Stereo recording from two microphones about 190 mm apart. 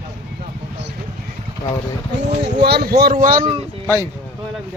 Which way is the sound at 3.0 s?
50° right (ahead or behind).